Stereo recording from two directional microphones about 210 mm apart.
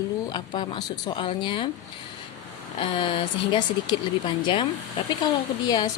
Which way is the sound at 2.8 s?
25° left (ahead or behind).